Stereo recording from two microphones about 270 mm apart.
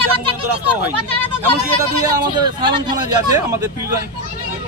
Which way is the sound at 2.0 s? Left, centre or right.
Centre.